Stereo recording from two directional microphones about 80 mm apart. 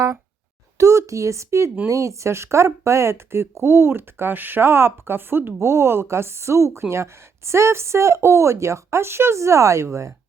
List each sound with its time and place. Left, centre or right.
0.8 s speech: right